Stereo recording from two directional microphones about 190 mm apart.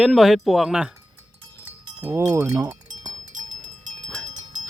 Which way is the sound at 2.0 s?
15° right (ahead or behind).